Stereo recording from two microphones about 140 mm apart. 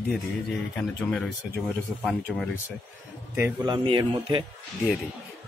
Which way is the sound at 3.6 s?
35° right (ahead or behind).